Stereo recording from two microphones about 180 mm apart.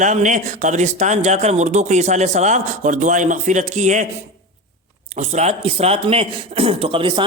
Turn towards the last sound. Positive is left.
turn(degrees=-30)  # may be behind; listen again after turning